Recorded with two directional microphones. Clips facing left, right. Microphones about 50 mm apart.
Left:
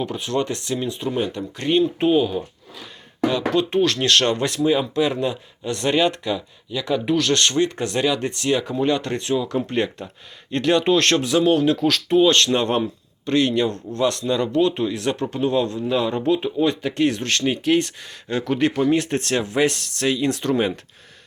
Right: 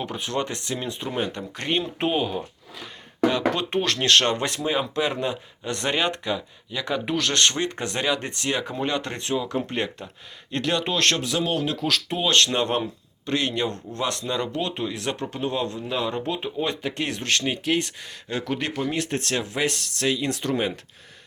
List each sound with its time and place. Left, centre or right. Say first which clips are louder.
0.0 s speech: left 4 dB; right
1.3 s speech: left 6 dB; right
6.7 s speech: left 5 dB; right
8.8 s speech: left 6 dB; centre
10.5 s speech: left 7 dB; centre
15.9 s speech: left 8 dB; centre